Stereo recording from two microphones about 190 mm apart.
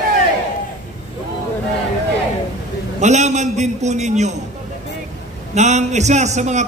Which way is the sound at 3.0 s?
35° right (ahead or behind).